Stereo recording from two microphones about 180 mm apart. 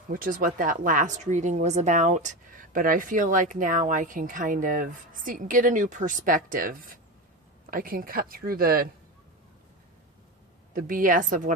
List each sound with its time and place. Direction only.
0.1 s a woman's voice: 50° right (ahead or behind)
10.8 s a woman's voice: 50° right (ahead or behind)